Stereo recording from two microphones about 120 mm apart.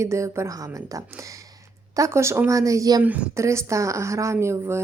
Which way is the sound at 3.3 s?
25° right (ahead or behind).